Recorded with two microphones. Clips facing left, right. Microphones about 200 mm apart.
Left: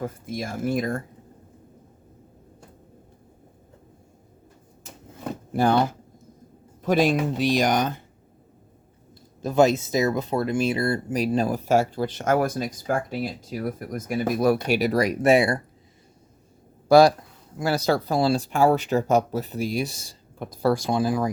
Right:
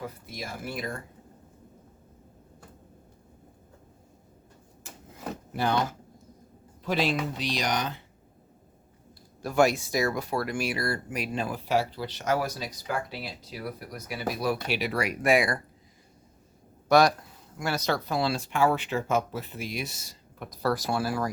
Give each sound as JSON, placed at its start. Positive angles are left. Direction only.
{"t": 0.0, "sound": "speech", "side_deg": 50}
{"t": 6.8, "sound": "speech", "side_deg": 50}
{"t": 9.4, "sound": "speech", "side_deg": 20}
{"t": 16.9, "sound": "speech", "side_deg": 30}
{"t": 20.9, "sound": "speech", "side_deg": 15}